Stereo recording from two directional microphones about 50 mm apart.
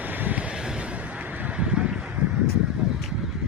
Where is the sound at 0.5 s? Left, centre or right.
Centre; by 1.5 s right.